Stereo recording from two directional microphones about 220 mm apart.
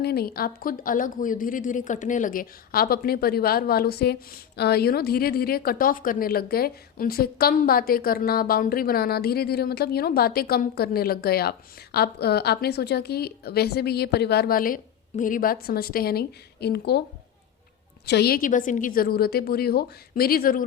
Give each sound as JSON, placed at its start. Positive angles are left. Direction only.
{"t": 0.0, "sound": "speech", "side_deg": 45}
{"t": 18.0, "sound": "speech", "side_deg": 50}